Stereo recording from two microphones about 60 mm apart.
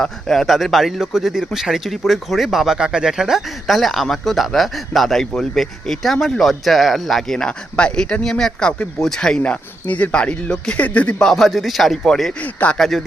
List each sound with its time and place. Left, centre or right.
0.0 s speech: centre
9.4 s speech: left
11.2 s speech: centre
12.4 s speech: left
12.7 s speech: centre